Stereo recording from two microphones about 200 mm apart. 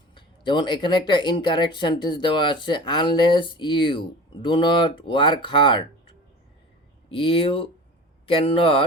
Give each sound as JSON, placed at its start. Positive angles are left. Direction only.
{"t": 0.1, "sound": "speech", "side_deg": 25}